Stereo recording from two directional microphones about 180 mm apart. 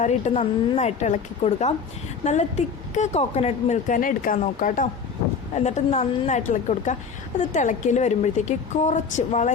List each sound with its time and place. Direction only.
0.0 s speech: 40° left (ahead or behind)